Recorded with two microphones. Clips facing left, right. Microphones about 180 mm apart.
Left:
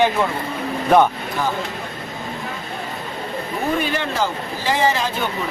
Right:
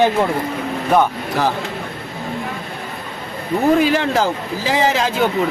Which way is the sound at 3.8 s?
90° right.